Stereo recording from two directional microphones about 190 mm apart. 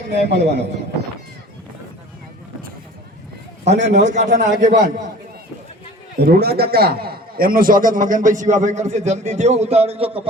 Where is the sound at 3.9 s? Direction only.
40° right (ahead or behind).